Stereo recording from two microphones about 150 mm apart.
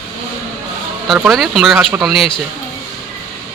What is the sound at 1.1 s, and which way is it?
Speech, centre (ahead or behind).